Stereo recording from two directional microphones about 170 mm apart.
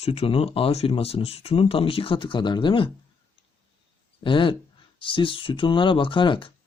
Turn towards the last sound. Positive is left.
turn(degrees=30)  # may be behind; listen again after turning